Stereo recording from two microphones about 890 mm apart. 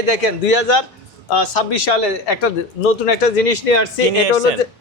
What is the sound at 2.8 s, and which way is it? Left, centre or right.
Speech, left.